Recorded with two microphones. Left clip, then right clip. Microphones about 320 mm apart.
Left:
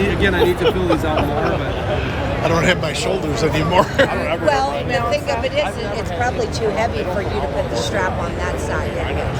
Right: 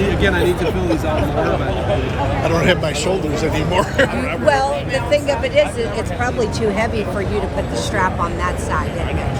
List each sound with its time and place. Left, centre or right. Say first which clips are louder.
0.0 s speech: even; centre
2.4 s speech: even; centre
4.4 s speech: right 3 dB; right